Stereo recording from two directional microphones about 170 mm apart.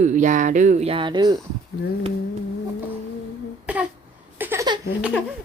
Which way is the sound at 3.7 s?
10° right (ahead or behind).